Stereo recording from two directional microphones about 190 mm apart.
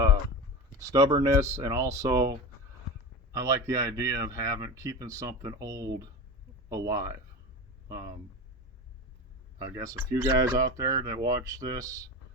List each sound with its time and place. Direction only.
0.8 s speech: 20° right (ahead or behind)
3.3 s speech: 15° right (ahead or behind)
10.1 s speech: 15° right (ahead or behind)